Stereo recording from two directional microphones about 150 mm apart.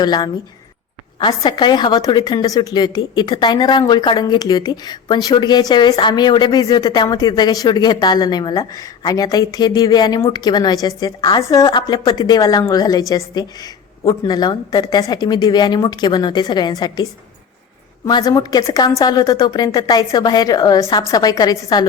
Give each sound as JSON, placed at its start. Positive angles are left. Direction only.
{"t": 0.0, "sound": "a woman's voice", "side_deg": 30}